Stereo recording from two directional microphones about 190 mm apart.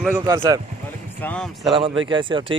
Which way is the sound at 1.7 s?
25° right (ahead or behind).